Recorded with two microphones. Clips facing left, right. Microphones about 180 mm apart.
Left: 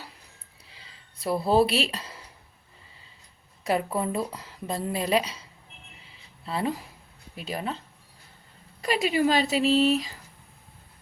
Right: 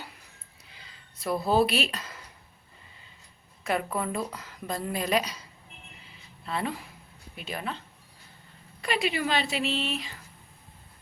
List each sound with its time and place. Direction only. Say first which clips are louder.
0.8 s a sound: left 2 dB; 30° left (ahead or behind)
3.6 s a woman's voice: left 3 dB; 35° left (ahead or behind)
8.8 s speech: left 5 dB; 40° left (ahead or behind)